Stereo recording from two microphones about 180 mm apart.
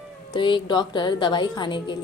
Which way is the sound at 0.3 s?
25° left (ahead or behind).